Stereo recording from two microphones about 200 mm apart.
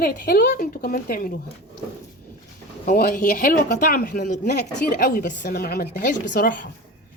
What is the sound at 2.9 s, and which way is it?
A woman's voice, 45° left (ahead or behind).